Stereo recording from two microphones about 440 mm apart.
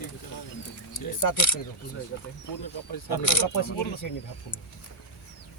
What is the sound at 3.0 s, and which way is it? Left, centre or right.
Speech, left.